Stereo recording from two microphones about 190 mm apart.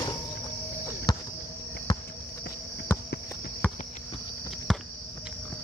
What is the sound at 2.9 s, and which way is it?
Walk, 10° left (ahead or behind).